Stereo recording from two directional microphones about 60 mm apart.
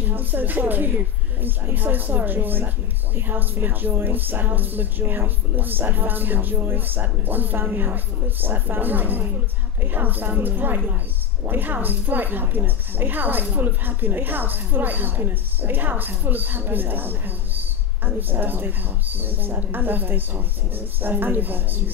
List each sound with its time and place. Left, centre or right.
0.0 s a woman's voice: right